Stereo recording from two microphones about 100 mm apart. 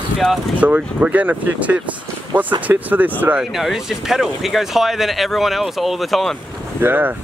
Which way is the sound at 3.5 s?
5° right (ahead or behind).